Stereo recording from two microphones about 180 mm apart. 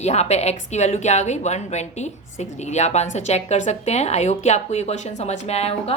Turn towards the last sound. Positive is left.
turn(degrees=35)  # may be behind; listen again after turning